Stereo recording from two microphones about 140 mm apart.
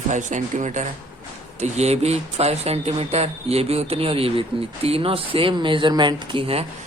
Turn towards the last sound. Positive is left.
turn(degrees=-40)  # may be behind; listen again after turning